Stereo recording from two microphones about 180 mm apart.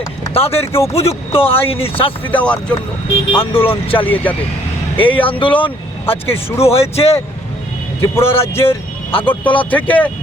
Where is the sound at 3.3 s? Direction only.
30° left (ahead or behind).